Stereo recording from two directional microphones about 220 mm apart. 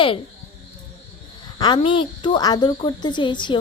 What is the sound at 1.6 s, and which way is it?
Speech, 20° left (ahead or behind).